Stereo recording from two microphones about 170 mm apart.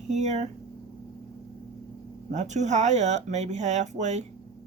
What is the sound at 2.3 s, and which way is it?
Speech, 45° right (ahead or behind).